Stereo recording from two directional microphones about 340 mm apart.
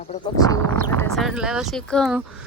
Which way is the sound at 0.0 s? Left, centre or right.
Centre.